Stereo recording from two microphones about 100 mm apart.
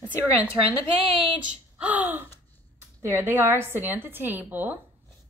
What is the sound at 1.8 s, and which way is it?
A woman's voice, 15° right (ahead or behind).